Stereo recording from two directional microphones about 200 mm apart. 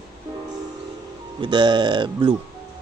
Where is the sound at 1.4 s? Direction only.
25° right (ahead or behind).